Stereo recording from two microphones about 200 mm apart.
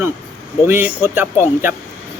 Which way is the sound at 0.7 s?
10° right (ahead or behind).